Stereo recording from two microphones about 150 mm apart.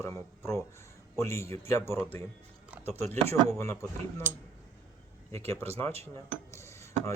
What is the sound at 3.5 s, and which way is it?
Speech, 20° left (ahead or behind).